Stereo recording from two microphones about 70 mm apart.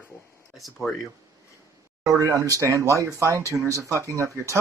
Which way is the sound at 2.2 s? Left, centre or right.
Right.